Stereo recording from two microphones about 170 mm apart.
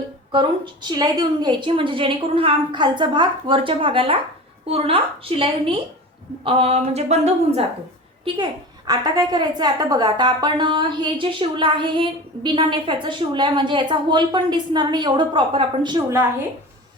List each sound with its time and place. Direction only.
0.3 s a woman's voice: 25° right (ahead or behind)
8.9 s a woman's voice: 20° right (ahead or behind)